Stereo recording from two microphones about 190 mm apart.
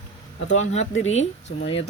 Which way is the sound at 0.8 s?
90° left.